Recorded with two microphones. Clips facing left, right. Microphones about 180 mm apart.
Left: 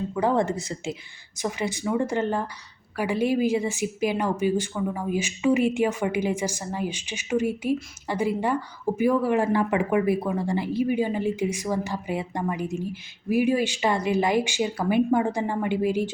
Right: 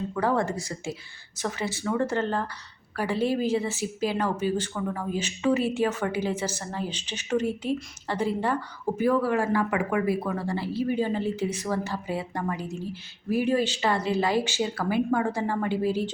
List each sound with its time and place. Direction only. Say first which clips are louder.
0.1 s speech: left 3 dB; 20° left (ahead or behind)